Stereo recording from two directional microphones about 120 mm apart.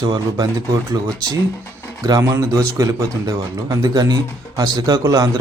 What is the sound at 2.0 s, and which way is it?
Speech, 30° right (ahead or behind).